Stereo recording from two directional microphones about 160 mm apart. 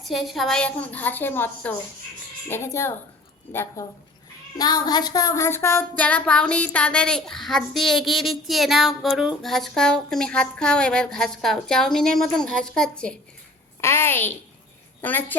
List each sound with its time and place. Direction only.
0.0 s a woman's voice: centre (ahead or behind)
4.5 s a sound: 25° left (ahead or behind)
6.0 s a woman's voice: 10° left (ahead or behind)